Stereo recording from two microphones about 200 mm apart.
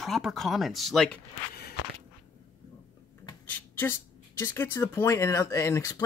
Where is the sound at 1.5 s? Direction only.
50° left (ahead or behind).